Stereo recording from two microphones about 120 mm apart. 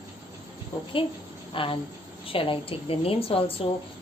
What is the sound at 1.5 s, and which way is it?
A woman's voice, 45° left (ahead or behind).